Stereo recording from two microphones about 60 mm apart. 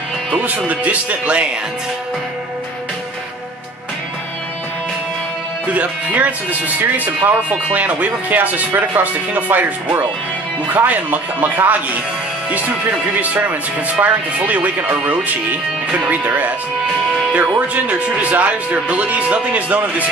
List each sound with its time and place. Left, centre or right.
0.7 s speech: right
5.7 s speech: right
17.3 s speech: right